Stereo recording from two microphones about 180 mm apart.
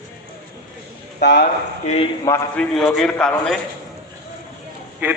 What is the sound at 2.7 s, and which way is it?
Speech, centre (ahead or behind).